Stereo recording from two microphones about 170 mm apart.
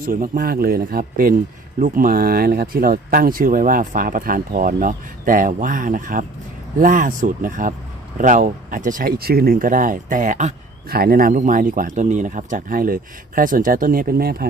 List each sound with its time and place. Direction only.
0.0 s speech: 55° right (ahead or behind)